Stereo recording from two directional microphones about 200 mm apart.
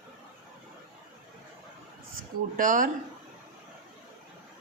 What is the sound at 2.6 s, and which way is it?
Speech, 40° right (ahead or behind).